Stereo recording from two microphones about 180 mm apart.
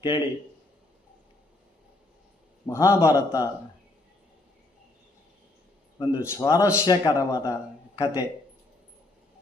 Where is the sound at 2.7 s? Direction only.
15° left (ahead or behind).